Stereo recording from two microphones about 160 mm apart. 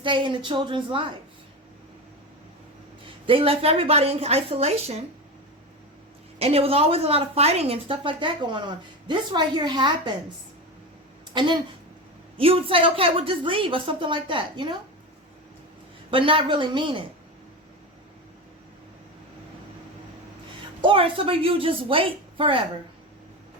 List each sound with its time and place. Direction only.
0.0 s a woman's voice: 30° right (ahead or behind)
3.2 s a woman's voice: 35° right (ahead or behind)
6.4 s a woman's voice: 35° right (ahead or behind)
11.3 s a woman's voice: 30° right (ahead or behind)
16.0 s a woman's voice: 30° right (ahead or behind)
20.8 s a woman's voice: 35° right (ahead or behind)